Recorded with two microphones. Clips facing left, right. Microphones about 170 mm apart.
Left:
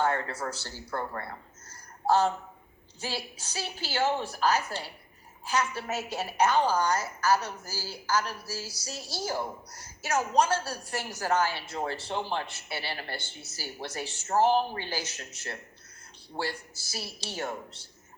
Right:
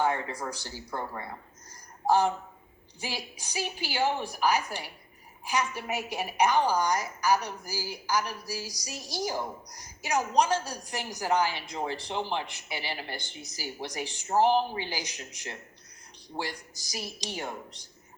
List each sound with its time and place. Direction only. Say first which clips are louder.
0.0 s a woman's voice: even; 15° right (ahead or behind)